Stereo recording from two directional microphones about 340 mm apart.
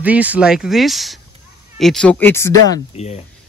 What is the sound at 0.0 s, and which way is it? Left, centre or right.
A man's voice, centre.